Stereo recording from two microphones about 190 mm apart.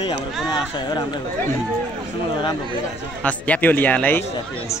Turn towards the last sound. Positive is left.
turn(degrees=10)  # may be behind; listen again after turning